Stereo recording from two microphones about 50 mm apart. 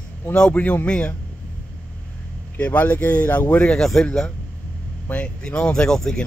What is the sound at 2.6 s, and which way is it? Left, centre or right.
Speech, left.